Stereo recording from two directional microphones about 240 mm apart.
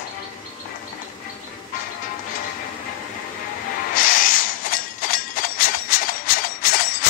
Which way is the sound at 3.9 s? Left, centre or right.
Left.